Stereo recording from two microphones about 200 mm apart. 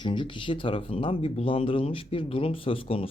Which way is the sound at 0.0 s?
25° left (ahead or behind).